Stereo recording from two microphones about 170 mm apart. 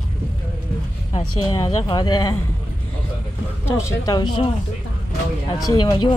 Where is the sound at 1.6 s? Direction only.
25° left (ahead or behind).